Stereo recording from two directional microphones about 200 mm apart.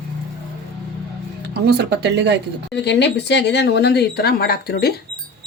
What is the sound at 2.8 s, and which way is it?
Speech, 60° left (ahead or behind).